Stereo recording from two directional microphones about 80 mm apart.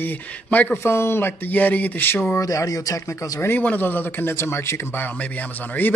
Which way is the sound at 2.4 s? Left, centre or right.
Left.